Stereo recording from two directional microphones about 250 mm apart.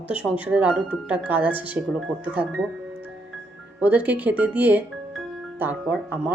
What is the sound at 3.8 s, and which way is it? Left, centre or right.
Speech, centre.